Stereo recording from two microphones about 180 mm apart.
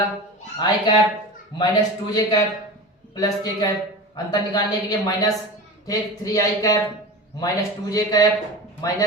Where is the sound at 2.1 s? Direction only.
20° left (ahead or behind).